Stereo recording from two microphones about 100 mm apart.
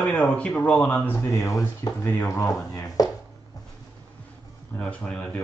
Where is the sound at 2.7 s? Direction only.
40° left (ahead or behind).